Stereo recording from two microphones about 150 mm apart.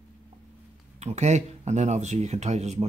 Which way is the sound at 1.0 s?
50° right (ahead or behind).